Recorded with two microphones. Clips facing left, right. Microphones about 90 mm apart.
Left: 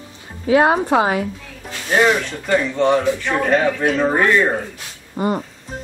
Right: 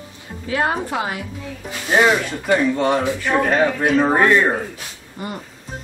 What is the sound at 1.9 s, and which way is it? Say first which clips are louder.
Speech: even; 5° right (ahead or behind).